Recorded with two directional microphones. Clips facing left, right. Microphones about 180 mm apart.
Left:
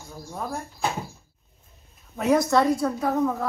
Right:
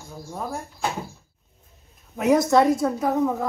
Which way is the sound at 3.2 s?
15° right (ahead or behind).